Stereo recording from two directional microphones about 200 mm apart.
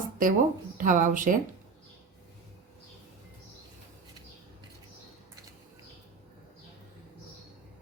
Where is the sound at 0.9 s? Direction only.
40° right (ahead or behind).